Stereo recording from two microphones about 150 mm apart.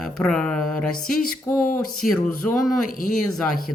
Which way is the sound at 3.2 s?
Centre (ahead or behind).